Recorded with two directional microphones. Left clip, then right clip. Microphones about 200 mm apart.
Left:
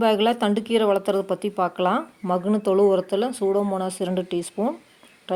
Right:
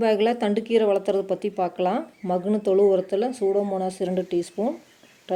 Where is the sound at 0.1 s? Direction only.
30° left (ahead or behind).